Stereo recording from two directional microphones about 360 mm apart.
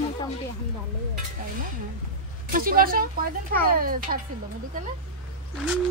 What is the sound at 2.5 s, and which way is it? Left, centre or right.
Speech, right.